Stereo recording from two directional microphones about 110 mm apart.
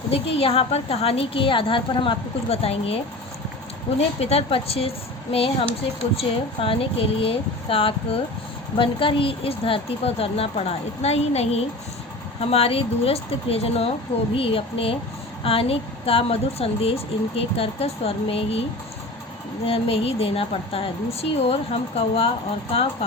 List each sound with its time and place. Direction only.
0.1 s speech: 60° left (ahead or behind)
4.2 s speech: 65° left (ahead or behind)
19.6 s speech: 60° left (ahead or behind)